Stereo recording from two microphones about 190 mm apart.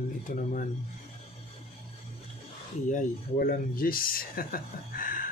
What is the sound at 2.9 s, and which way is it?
Speech, 45° left (ahead or behind).